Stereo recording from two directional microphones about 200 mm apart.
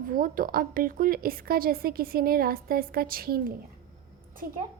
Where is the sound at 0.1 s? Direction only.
45° right (ahead or behind).